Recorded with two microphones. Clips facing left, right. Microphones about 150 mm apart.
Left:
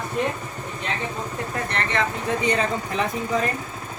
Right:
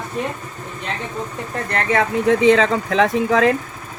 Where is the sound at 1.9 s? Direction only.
75° right (ahead or behind); by 3.5 s 90° right.